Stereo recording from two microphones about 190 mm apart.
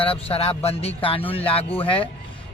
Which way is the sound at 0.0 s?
30° left (ahead or behind).